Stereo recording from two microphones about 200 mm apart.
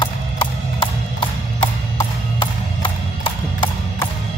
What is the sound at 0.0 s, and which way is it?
Music, 25° left (ahead or behind).